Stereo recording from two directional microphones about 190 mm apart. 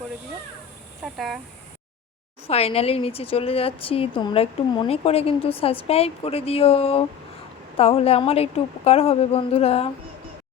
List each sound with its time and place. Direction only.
1.0 s speech: centre (ahead or behind)
2.5 s a woman's voice: 30° left (ahead or behind)